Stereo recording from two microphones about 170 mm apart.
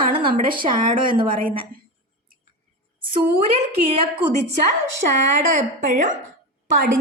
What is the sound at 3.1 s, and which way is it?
A woman's voice, 35° right (ahead or behind).